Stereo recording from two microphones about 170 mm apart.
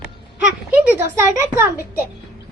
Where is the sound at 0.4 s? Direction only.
10° right (ahead or behind).